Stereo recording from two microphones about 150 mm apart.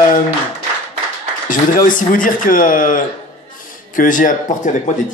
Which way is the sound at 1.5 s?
65° left (ahead or behind).